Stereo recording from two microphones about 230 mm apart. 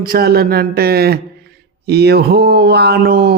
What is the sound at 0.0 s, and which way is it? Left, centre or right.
Speech, right.